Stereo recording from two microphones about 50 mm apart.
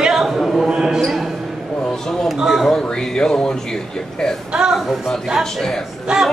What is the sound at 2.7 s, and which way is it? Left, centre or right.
Speech, centre.